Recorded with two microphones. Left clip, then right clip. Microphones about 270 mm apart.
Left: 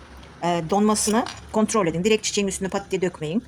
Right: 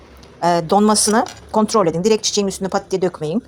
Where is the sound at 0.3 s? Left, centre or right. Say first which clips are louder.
Right 7 dB; right.